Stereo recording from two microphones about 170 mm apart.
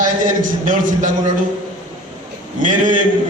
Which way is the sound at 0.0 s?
50° right (ahead or behind).